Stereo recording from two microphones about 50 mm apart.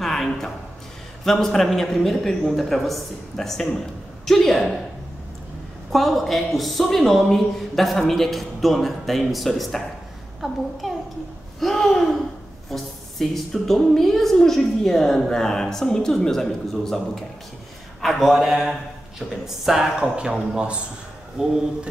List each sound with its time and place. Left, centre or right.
0.0 s a sound: centre
1.2 s a woman's voice: centre
5.9 s a woman's voice: centre
11.6 s a woman's voice: centre
18.0 s speech: centre
20.0 s a man's voice: centre